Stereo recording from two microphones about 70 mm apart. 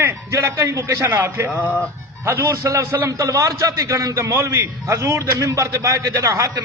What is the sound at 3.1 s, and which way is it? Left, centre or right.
A man's voice, right.